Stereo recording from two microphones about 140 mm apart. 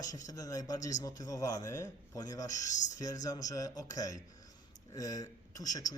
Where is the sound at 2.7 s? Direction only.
60° left (ahead or behind).